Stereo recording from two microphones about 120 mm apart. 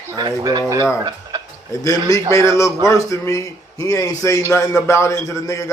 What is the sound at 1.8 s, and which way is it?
A man's voice, 25° left (ahead or behind).